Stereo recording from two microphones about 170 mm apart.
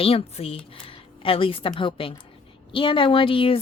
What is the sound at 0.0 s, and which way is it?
A woman's voice, 35° left (ahead or behind).